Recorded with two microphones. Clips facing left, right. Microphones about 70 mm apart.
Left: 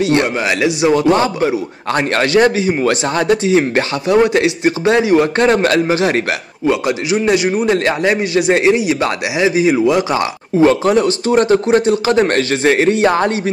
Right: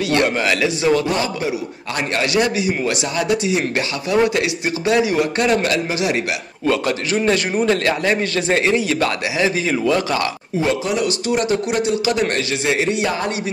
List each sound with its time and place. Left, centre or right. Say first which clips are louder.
0.0 s a man's voice: left 3 dB; left
6.6 s a man's voice: left 3 dB; centre
7.7 s a man's voice: left 4 dB; left
10.6 s a man's voice: left 8 dB; left